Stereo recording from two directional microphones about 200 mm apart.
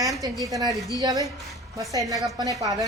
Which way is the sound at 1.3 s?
Centre (ahead or behind).